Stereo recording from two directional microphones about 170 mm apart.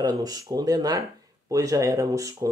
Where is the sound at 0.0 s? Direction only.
20° right (ahead or behind).